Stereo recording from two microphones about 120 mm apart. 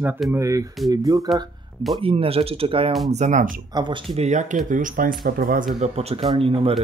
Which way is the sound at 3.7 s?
40° right (ahead or behind).